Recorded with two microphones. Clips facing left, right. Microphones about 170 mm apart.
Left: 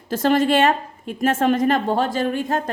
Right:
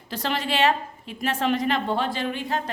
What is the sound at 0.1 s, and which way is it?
A woman's voice, 45° left (ahead or behind).